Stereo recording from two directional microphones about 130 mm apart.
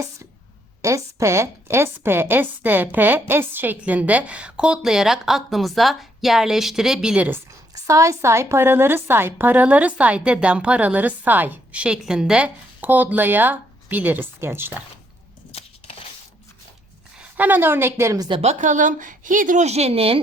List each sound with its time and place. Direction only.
0.8 s a woman's voice: 25° right (ahead or behind)
7.9 s a woman's voice: 25° right (ahead or behind)
15.5 s a sound: 50° left (ahead or behind)
17.2 s a woman's voice: 10° right (ahead or behind)
18.3 s speech: 45° right (ahead or behind)
18.6 s a woman's voice: 75° right (ahead or behind); by 20.1 s 50° right (ahead or behind)